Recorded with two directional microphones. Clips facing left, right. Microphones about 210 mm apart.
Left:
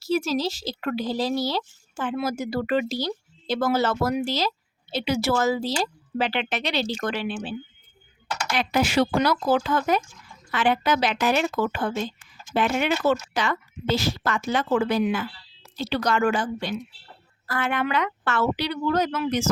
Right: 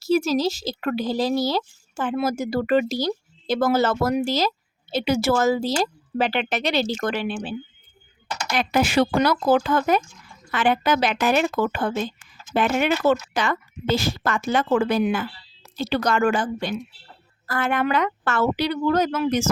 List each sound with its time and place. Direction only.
0.0 s speech: 45° right (ahead or behind)
8.5 s speech: 50° right (ahead or behind)